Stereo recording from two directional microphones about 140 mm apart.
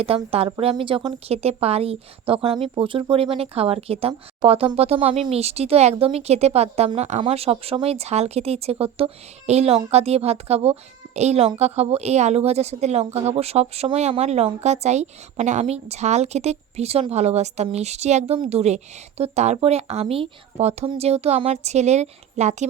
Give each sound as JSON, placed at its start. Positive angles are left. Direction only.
{"t": 0.0, "sound": "speech", "side_deg": -45}